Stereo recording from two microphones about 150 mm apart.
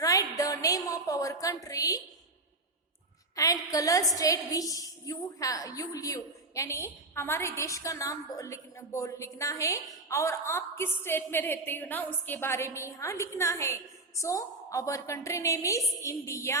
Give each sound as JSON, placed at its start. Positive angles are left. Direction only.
{"t": 0.0, "sound": "a woman's voice", "side_deg": 25}
{"t": 3.3, "sound": "a woman's voice", "side_deg": 20}